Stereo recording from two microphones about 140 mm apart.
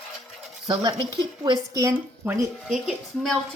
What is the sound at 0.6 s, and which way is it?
Speech, 30° right (ahead or behind).